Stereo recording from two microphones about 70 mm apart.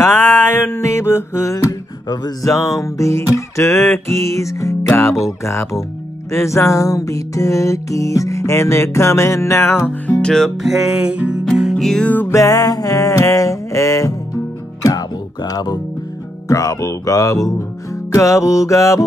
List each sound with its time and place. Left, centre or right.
0.0 s music: left
2.4 s music: left
10.2 s music: centre
10.8 s music: centre
11.7 s music: centre
12.0 s music: left
12.3 s music: left
16.4 s music: left